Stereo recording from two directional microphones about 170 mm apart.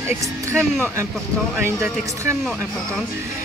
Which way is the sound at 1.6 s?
15° right (ahead or behind).